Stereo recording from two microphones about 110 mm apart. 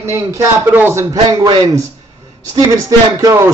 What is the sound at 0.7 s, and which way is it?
Speech, 15° right (ahead or behind).